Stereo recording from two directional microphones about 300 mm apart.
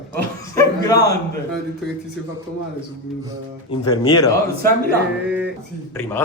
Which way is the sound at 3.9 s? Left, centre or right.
Centre.